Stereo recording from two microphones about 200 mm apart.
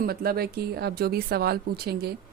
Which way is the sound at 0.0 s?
50° right (ahead or behind).